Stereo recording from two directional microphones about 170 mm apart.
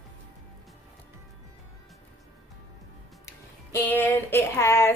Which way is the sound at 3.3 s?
10° left (ahead or behind).